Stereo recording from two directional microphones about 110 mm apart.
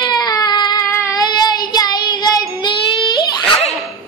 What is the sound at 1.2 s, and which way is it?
Child singing, 40° left (ahead or behind).